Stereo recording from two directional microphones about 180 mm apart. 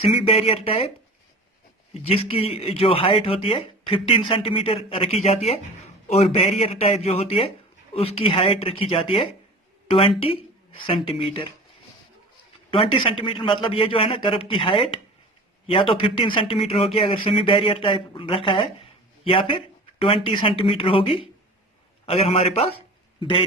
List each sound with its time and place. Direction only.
0.0 s speech: 35° left (ahead or behind)
12.7 s a man's voice: 30° left (ahead or behind)